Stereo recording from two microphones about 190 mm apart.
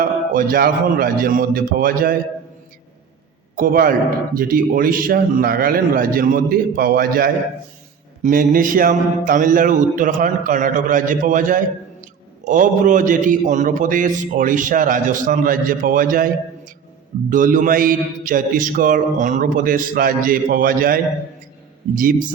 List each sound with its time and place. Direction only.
0.0 s a man's voice: 50° right (ahead or behind)
3.5 s a man's voice: 50° right (ahead or behind)